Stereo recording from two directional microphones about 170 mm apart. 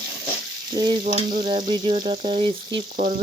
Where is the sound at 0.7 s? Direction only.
25° right (ahead or behind).